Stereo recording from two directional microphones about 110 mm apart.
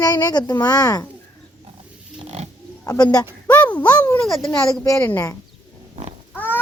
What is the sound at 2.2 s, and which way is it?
Pig, 85° right.